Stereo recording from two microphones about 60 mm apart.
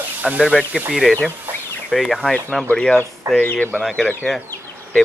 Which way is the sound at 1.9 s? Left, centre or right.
Centre.